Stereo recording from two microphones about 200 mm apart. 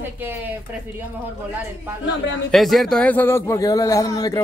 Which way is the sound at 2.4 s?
Centre (ahead or behind).